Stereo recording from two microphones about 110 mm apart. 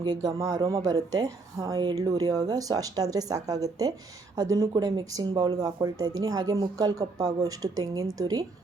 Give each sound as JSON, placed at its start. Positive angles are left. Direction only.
{"t": 0.0, "sound": "speech", "side_deg": -40}